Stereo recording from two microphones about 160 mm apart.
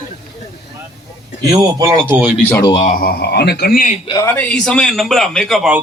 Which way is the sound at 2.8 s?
65° left (ahead or behind).